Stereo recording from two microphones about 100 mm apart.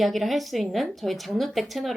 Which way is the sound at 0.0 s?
Centre (ahead or behind).